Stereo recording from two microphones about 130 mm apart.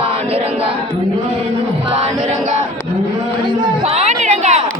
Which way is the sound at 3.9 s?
55° right (ahead or behind).